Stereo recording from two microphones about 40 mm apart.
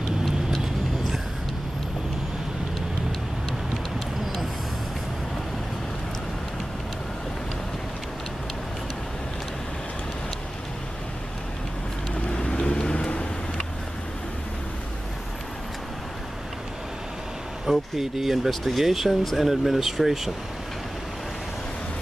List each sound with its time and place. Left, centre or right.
12.3 s vehicle: left
17.6 s speech: centre